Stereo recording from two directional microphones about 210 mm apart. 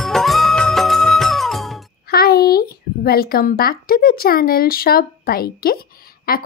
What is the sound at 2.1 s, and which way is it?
A woman's voice, 45° left (ahead or behind).